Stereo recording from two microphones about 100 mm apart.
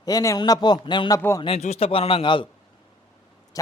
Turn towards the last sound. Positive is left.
turn(degrees=35)  # may be behind; listen again after turning